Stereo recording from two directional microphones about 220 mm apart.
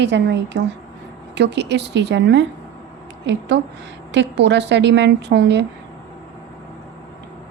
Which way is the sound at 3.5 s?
50° right (ahead or behind).